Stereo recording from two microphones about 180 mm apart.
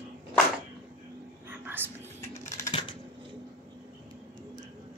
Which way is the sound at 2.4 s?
40° left (ahead or behind).